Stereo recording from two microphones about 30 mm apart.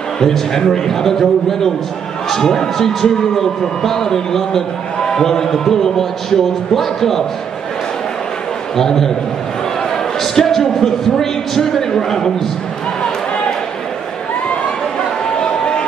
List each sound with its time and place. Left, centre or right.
0.3 s a man's voice: centre
8.7 s a man's voice: centre
10.2 s a man's voice: centre
15.3 s a sound: left